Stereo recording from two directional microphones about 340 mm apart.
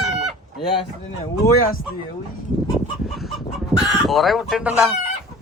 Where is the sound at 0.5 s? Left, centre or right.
Centre.